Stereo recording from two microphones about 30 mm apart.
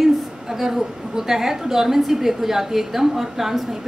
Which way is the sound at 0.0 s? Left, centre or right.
Centre.